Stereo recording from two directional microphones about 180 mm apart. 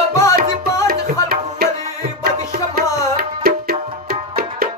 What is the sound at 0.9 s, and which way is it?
Tabla, 60° right (ahead or behind).